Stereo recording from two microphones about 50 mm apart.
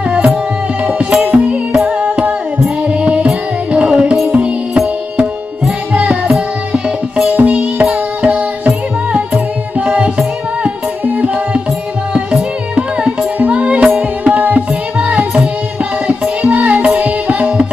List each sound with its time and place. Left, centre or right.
0.8 s music: right
2.9 s music: right
5.9 s music: right
7.3 s music: right
13.4 s music: right